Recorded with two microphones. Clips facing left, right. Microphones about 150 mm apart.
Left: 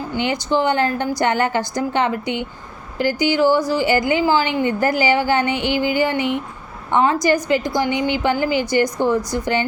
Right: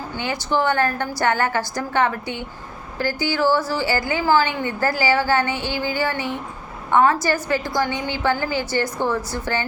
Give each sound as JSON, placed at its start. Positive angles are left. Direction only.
{"t": 0.2, "sound": "a woman's voice", "side_deg": 20}